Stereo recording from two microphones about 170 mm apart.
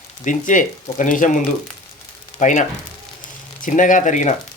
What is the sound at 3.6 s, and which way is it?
Speech, 50° left (ahead or behind).